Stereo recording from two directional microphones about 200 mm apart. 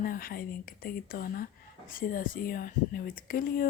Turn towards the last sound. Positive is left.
turn(degrees=45)  # may be behind; listen again after turning